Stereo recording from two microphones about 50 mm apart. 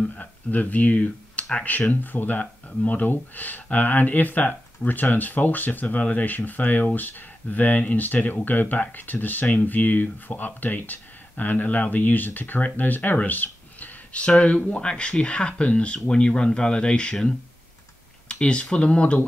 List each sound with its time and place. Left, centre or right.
0.1 s speech: left